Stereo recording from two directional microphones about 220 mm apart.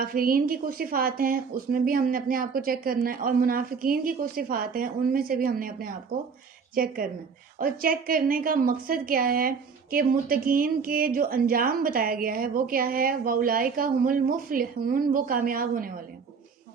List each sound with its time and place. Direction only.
0.0 s a woman's voice: 40° right (ahead or behind)